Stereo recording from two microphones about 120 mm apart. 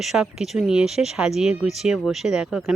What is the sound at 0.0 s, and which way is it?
Speech, 5° right (ahead or behind).